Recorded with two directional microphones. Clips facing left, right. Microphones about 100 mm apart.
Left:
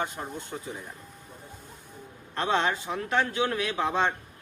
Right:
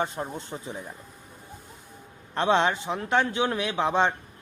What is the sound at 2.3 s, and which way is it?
A man's voice, 25° right (ahead or behind).